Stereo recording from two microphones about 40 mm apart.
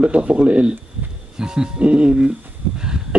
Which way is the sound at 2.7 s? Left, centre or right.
Centre.